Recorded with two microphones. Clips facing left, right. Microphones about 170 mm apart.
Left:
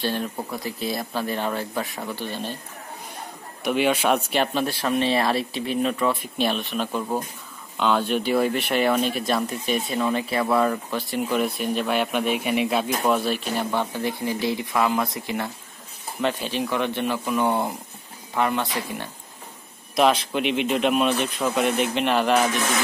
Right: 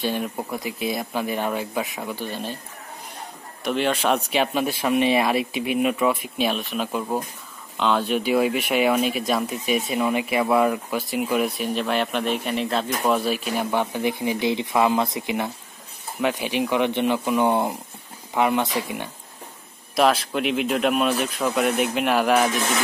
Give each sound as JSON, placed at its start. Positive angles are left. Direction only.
{"t": 0.0, "sound": "speech", "side_deg": -10}
{"t": 3.6, "sound": "speech", "side_deg": 10}
{"t": 4.6, "sound": "speech", "side_deg": -15}
{"t": 9.8, "sound": "speech", "side_deg": -15}
{"t": 20.0, "sound": "speech", "side_deg": 0}